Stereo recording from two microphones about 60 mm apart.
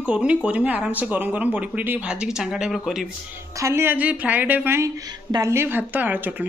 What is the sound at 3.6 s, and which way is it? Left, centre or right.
Speech, right.